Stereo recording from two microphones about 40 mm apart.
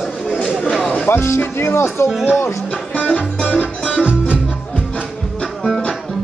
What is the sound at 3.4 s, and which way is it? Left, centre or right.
Music, left.